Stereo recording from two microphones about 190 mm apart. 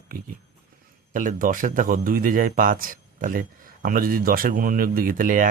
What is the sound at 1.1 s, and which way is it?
A man's voice, 45° right (ahead or behind).